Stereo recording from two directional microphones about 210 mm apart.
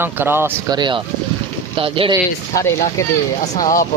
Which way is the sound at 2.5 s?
15° left (ahead or behind).